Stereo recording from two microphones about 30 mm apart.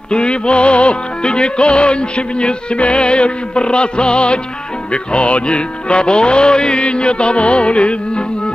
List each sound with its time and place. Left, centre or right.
0.1 s music: left